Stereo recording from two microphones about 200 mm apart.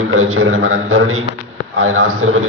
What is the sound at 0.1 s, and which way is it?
A man's voice, 90° right.